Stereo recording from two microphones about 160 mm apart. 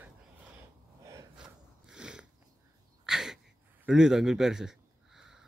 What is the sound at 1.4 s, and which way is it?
Biting, 5° right (ahead or behind).